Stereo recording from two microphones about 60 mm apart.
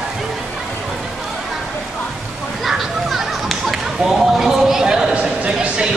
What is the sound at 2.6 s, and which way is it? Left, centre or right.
Whip, centre.